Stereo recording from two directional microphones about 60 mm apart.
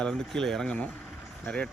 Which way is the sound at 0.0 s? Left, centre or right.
Centre.